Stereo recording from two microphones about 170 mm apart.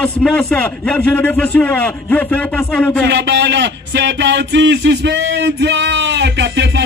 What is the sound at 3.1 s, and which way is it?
Speech, 90° right.